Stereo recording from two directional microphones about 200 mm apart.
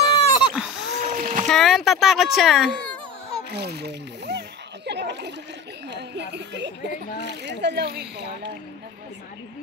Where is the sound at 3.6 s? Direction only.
55° right (ahead or behind).